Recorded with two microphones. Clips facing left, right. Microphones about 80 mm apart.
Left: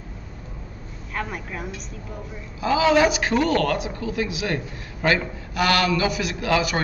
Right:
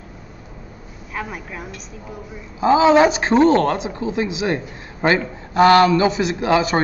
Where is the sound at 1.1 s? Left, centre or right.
Centre.